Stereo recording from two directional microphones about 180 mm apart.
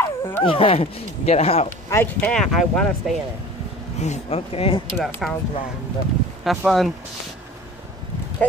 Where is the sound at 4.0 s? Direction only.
40° left (ahead or behind).